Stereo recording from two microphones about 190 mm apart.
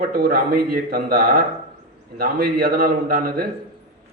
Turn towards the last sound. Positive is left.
turn(degrees=-55)  # may be behind; listen again after turning